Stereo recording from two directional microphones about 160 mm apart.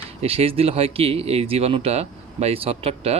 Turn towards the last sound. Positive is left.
turn(degrees=-40)  # may be behind; listen again after turning